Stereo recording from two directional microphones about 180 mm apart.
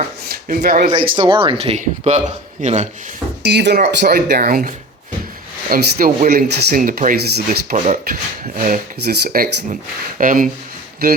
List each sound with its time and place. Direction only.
0.3 s speech: 55° right (ahead or behind)
1.1 s speech: 30° right (ahead or behind)
3.4 s speech: 70° right (ahead or behind)
7.8 s speech: 45° right (ahead or behind)
11.0 s speech: 60° right (ahead or behind)